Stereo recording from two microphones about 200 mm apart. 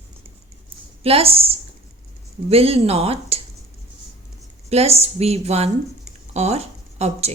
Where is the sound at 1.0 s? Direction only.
30° right (ahead or behind).